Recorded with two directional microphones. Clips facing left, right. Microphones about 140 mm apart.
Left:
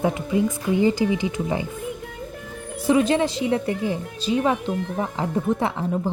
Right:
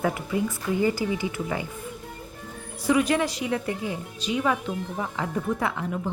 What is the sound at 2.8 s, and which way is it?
A woman's voice, 25° left (ahead or behind).